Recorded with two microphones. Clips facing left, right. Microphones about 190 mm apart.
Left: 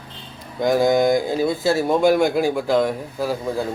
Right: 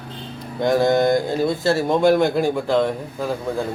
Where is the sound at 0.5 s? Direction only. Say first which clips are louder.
Even; centre (ahead or behind).